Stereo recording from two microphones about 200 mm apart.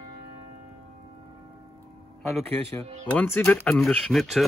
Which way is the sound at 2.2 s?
Centre (ahead or behind).